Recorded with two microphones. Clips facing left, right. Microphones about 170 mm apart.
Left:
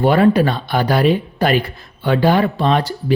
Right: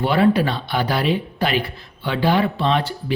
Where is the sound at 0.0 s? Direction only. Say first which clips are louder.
Left 4 dB; 45° left (ahead or behind).